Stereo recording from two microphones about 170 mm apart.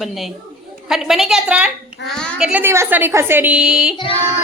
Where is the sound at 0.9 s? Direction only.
Centre (ahead or behind).